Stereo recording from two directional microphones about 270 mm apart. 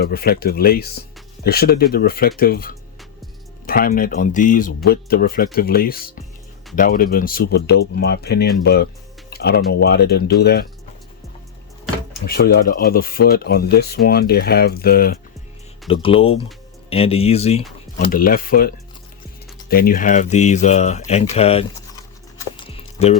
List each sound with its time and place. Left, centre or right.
0.0 s speech: left
12.1 s speech: left
15.9 s speech: left
22.5 s music: centre